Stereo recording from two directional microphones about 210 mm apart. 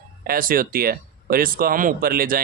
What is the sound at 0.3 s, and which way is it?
Speech, 40° right (ahead or behind).